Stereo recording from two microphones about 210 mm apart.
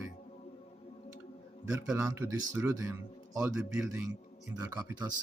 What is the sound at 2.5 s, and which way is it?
A man's voice, 15° right (ahead or behind).